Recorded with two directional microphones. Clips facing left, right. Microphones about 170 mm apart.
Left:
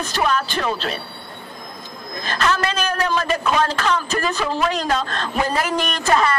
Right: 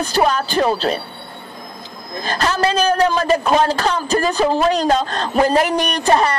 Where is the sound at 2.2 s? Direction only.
35° right (ahead or behind).